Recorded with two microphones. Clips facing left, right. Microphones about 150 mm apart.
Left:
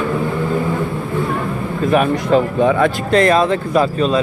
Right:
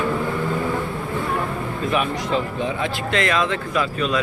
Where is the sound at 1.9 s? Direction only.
50° left (ahead or behind).